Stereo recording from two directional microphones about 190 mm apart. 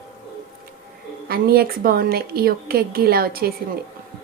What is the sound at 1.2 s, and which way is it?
A woman's voice, 55° right (ahead or behind).